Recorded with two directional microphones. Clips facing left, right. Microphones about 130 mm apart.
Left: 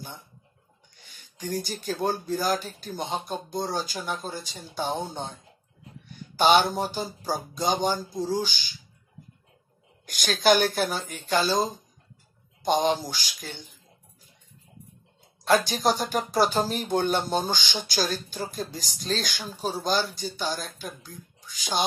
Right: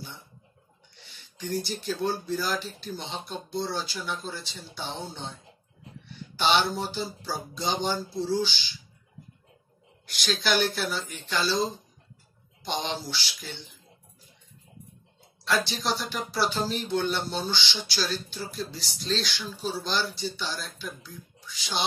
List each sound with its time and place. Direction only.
0.9 s speech: 45° left (ahead or behind)
10.0 s speech: 45° left (ahead or behind)
15.4 s speech: 45° left (ahead or behind)